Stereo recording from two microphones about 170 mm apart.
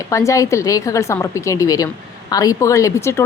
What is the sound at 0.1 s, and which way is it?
A woman's voice, 20° left (ahead or behind).